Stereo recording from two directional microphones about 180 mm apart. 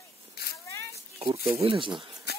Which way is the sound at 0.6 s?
15° left (ahead or behind).